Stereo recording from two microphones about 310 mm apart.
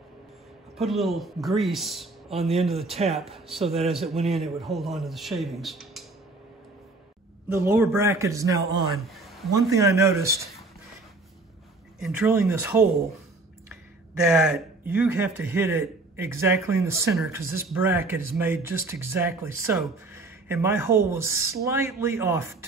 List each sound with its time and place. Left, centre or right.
0.7 s a man's voice: centre
7.4 s a man's voice: centre
9.0 s a sound: centre
9.6 s a man's voice: centre
12.0 s a man's voice: centre
14.2 s a man's voice: centre